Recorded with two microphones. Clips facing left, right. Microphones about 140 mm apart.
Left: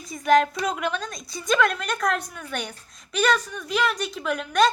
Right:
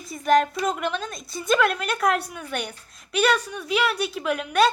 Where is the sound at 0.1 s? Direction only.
Centre (ahead or behind).